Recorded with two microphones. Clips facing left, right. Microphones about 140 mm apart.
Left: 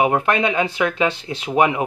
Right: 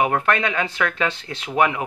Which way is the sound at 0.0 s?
15° left (ahead or behind).